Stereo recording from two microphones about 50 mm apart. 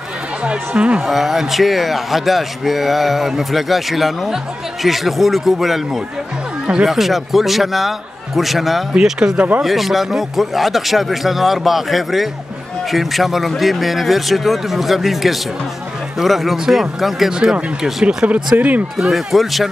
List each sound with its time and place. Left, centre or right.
0.4 s speech: right
1.0 s a man's voice: centre
6.9 s a man's voice: centre
17.3 s speech: centre; by 18.9 s right
18.9 s a man's voice: centre